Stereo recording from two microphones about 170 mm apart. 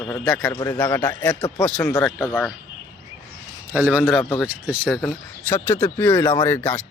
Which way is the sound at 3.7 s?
10° right (ahead or behind).